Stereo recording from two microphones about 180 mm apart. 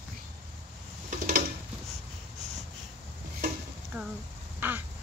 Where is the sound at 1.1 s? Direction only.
45° right (ahead or behind).